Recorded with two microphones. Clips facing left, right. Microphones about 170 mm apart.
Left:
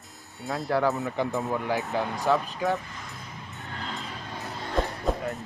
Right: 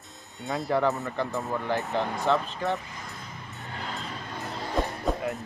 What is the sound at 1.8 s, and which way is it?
Speech, centre (ahead or behind).